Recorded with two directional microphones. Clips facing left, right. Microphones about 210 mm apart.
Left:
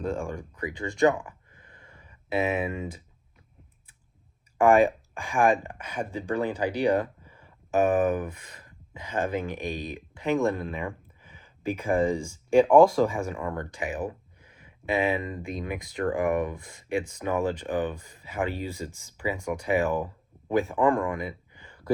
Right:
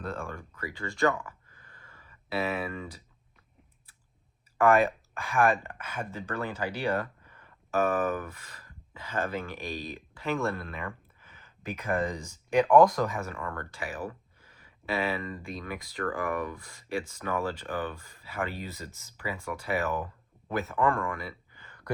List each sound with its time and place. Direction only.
0.0 s speech: 15° left (ahead or behind)
4.5 s speech: 15° left (ahead or behind)